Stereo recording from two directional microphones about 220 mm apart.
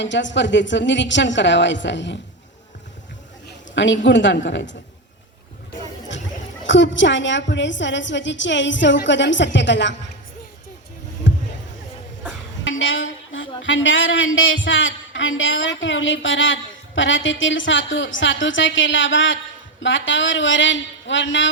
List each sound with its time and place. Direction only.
0.0 s a woman's voice: 55° left (ahead or behind)
3.8 s a woman's voice: 55° left (ahead or behind)
6.7 s a woman's voice: 55° left (ahead or behind)
11.3 s a sound: 55° left (ahead or behind)
12.8 s a sound: 60° left (ahead or behind)
13.6 s a woman's voice: 60° left (ahead or behind)